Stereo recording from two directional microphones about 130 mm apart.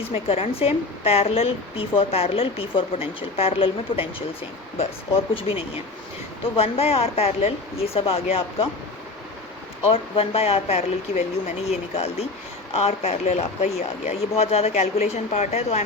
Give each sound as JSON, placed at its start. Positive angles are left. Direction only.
{"t": 0.1, "sound": "a woman's voice", "side_deg": 50}
{"t": 5.3, "sound": "a woman's voice", "side_deg": 45}
{"t": 9.9, "sound": "a woman's voice", "side_deg": 50}